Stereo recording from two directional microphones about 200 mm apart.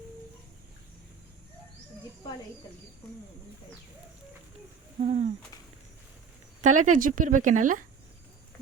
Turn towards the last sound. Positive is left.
turn(degrees=-40)  # may be behind; listen again after turning